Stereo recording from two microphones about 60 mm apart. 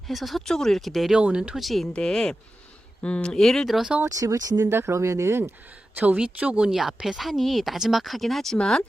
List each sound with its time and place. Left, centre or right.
0.1 s speech: centre
1.1 s speech: centre
1.5 s speech: centre
1.9 s speech: centre
3.3 s speech: centre
4.0 s speech: right
4.6 s speech: right
6.1 s speech: centre
6.7 s speech: centre